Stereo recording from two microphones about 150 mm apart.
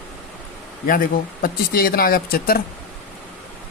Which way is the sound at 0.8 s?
70° left (ahead or behind).